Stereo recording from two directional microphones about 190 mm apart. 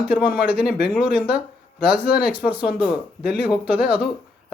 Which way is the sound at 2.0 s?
60° left (ahead or behind).